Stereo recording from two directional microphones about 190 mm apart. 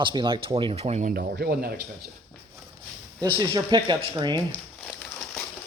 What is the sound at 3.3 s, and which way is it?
Speech, 20° right (ahead or behind).